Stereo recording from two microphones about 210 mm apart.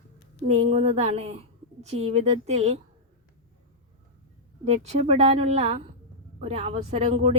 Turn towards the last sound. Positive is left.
turn(degrees=-30)  # may be behind; listen again after turning